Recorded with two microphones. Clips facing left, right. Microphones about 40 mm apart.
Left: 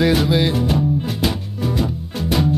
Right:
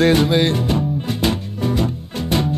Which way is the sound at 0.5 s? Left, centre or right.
Centre.